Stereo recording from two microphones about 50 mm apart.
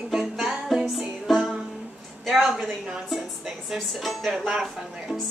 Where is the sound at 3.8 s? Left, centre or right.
Centre.